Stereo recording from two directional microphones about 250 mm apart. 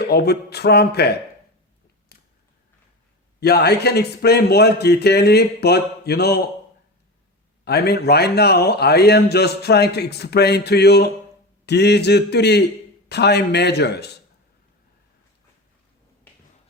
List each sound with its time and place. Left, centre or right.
0.1 s a man's voice: left
3.4 s a man's voice: left
7.6 s a man's voice: left